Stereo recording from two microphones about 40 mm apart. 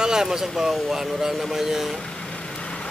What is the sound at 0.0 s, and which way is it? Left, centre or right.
Speech, centre.